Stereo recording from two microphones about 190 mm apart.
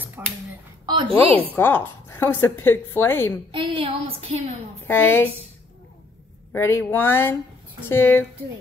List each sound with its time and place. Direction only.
0.2 s speech: 10° right (ahead or behind)
0.8 s a sound: 25° right (ahead or behind)
1.5 s a woman's voice: 10° left (ahead or behind)
3.5 s a woman's voice: 30° right (ahead or behind)
4.8 s a woman's voice: 10° left (ahead or behind)
6.5 s a woman's voice: 15° left (ahead or behind)